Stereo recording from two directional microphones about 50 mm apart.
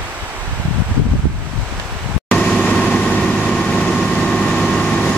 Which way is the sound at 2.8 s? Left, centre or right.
Centre.